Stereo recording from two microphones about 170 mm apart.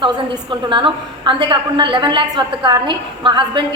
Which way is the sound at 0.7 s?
30° right (ahead or behind).